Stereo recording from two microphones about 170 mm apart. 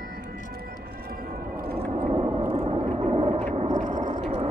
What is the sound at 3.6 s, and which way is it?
Vehicle, 40° right (ahead or behind).